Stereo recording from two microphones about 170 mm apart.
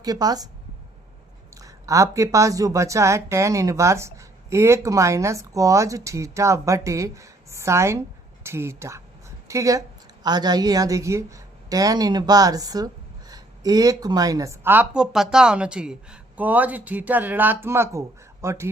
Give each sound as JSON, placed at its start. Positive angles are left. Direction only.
{"t": 0.0, "sound": "a woman's voice", "side_deg": -20}
{"t": 1.5, "sound": "a woman's voice", "side_deg": -20}